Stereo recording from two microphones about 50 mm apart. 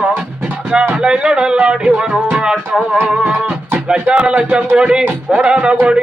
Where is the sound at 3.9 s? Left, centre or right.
Right.